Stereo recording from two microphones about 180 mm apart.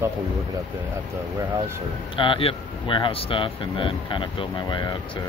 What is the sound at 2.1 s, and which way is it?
Speech, 30° left (ahead or behind).